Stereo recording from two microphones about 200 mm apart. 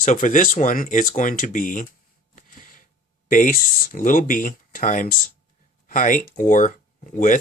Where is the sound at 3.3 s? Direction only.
40° left (ahead or behind).